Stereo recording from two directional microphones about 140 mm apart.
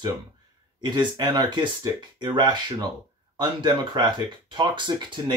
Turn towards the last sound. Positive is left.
turn(degrees=-35)  # may be behind; listen again after turning